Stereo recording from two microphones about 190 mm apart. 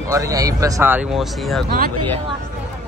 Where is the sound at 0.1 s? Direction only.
15° right (ahead or behind); by 1.6 s centre (ahead or behind).